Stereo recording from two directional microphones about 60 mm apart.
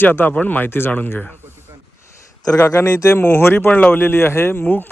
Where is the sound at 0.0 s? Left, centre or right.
Left.